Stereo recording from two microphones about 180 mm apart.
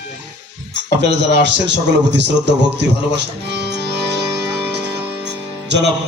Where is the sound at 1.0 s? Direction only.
75° right (ahead or behind).